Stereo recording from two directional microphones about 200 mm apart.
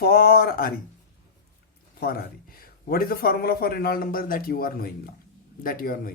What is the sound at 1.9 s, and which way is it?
A man's voice, 50° left (ahead or behind).